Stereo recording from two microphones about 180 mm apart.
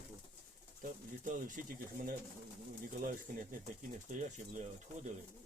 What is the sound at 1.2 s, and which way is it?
Speech, 45° right (ahead or behind).